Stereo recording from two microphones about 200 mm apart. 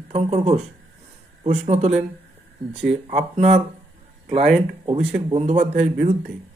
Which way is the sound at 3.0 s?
35° right (ahead or behind).